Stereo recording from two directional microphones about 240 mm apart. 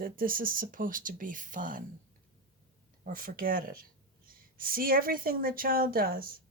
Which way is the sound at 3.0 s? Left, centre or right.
Right.